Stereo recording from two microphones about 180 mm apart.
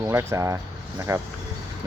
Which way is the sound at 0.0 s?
15° right (ahead or behind).